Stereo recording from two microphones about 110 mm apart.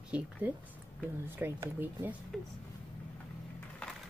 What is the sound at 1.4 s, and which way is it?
Speech, 20° right (ahead or behind).